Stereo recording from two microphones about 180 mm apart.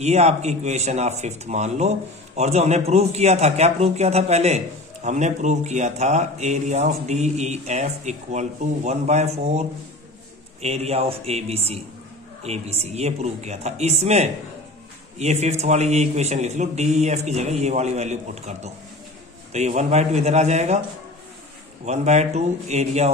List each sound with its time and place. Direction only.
0.0 s speech: 35° right (ahead or behind)
21.8 s speech: 40° right (ahead or behind)